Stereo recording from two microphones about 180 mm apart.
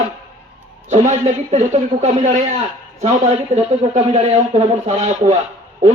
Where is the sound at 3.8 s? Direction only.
35° right (ahead or behind).